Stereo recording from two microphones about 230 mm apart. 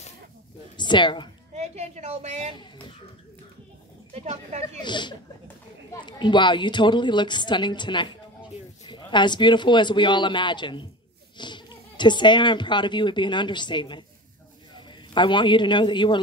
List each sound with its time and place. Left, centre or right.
0.7 s a woman's voice: centre
1.5 s a sound: right
4.1 s speech: right
4.8 s a woman's voice: centre
15.1 s a woman's voice: centre